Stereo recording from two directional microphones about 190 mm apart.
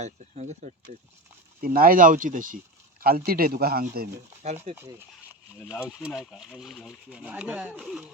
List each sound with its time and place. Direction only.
0.0 s speech: 35° right (ahead or behind)
1.6 s speech: 50° right (ahead or behind)
4.7 s speech: 10° right (ahead or behind)